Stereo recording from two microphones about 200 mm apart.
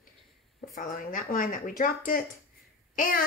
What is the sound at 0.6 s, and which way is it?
A child's voice, 45° left (ahead or behind).